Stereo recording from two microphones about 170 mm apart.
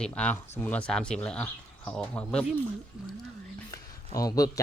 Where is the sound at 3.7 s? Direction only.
20° left (ahead or behind).